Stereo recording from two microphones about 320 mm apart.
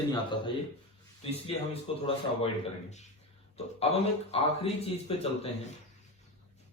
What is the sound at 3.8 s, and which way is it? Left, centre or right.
A man's voice, centre.